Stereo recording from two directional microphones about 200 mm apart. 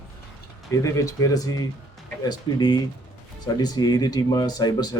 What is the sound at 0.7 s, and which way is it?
Speech, 15° left (ahead or behind).